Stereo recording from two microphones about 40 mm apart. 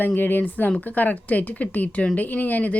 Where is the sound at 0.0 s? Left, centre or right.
Left.